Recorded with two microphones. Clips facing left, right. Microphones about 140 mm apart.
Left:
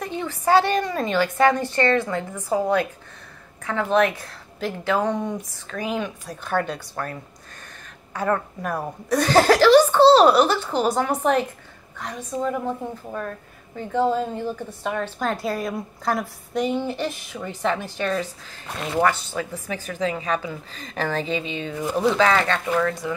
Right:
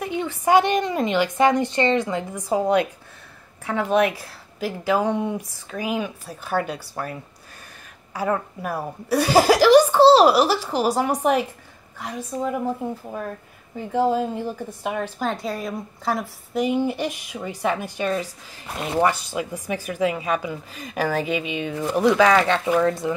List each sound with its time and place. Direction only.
0.0 s a woman's voice: 15° right (ahead or behind)